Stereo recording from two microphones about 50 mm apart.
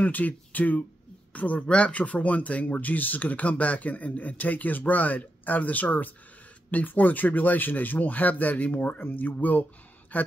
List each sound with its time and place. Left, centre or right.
0.0 s speech: left